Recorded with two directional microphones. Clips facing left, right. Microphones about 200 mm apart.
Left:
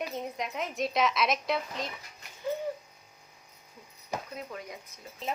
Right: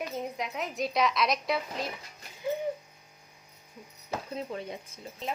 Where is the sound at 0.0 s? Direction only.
Centre (ahead or behind).